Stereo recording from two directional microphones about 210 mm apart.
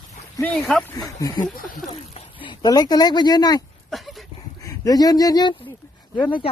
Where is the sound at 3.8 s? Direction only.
Centre (ahead or behind).